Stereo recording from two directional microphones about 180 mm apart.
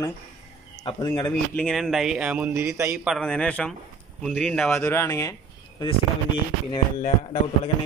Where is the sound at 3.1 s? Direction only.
5° left (ahead or behind).